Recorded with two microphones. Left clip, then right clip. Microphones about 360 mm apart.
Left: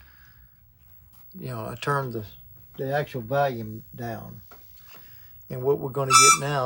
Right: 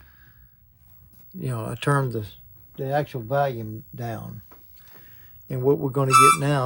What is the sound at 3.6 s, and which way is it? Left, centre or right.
Speech, right.